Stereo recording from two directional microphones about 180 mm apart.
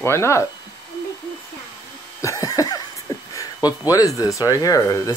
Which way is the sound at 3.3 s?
20° left (ahead or behind).